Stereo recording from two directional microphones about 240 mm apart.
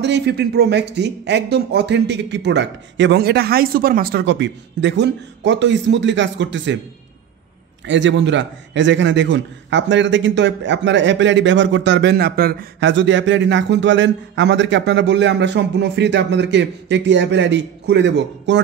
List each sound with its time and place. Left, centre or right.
0.0 s a man's voice: right
7.8 s a man's voice: right